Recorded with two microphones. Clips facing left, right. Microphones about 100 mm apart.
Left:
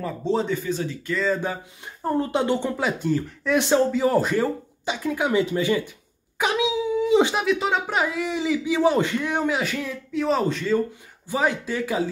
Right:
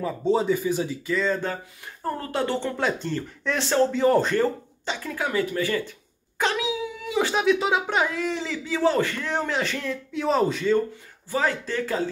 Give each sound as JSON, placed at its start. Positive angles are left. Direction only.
{"t": 0.0, "sound": "speech", "side_deg": 0}
{"t": 1.1, "sound": "speech", "side_deg": 5}
{"t": 2.0, "sound": "speech", "side_deg": 20}
{"t": 2.7, "sound": "speech", "side_deg": 5}
{"t": 6.3, "sound": "dog", "side_deg": 10}
{"t": 6.6, "sound": "a sound", "side_deg": 20}
{"t": 7.3, "sound": "speech", "side_deg": 0}
{"t": 11.2, "sound": "speech", "side_deg": 15}